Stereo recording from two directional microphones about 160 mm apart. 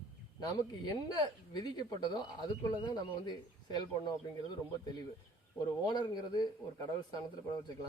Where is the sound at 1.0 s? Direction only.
25° left (ahead or behind).